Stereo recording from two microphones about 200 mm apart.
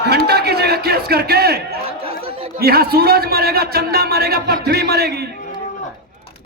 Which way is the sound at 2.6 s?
50° right (ahead or behind).